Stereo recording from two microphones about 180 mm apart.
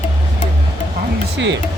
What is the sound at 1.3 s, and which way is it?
Speech, 75° right (ahead or behind).